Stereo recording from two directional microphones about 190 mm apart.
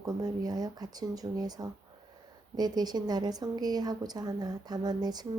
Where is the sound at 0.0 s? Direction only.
20° right (ahead or behind).